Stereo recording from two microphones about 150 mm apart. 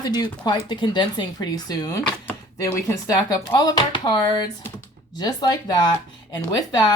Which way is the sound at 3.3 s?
25° left (ahead or behind).